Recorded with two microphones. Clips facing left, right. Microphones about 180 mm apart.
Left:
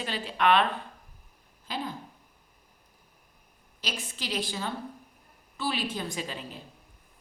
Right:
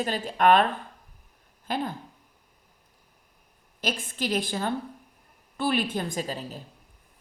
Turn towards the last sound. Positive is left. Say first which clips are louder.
# right 4 dB
turn(degrees=-40)  # may be behind; listen again after turning